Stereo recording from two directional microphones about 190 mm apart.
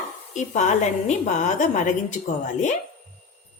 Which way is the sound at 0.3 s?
40° left (ahead or behind).